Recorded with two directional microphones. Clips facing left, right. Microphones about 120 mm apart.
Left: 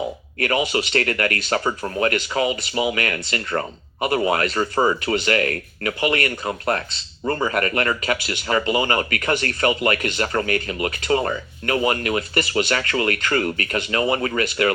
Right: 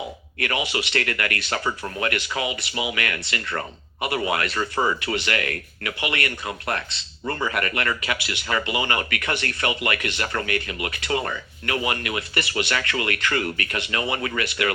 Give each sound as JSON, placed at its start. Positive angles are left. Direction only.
{"t": 0.3, "sound": "speech", "side_deg": 40}